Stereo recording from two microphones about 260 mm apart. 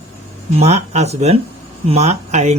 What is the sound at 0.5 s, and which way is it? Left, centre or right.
Speech, right.